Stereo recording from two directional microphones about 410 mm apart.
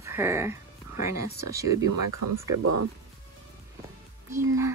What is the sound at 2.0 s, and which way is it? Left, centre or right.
Speech, right.